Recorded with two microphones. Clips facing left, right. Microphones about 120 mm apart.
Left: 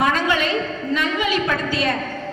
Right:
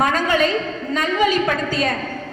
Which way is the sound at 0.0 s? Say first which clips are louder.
Right 1 dB; 40° right (ahead or behind).